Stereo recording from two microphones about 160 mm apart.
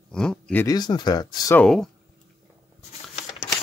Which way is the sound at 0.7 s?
25° left (ahead or behind).